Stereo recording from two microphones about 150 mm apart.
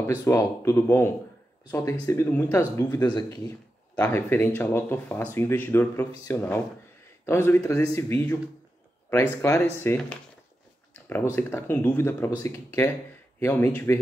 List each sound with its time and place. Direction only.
0.2 s speech: 20° left (ahead or behind)
11.3 s speech: 15° left (ahead or behind)